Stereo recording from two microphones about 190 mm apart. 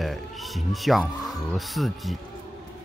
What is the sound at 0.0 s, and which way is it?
Speech, centre (ahead or behind).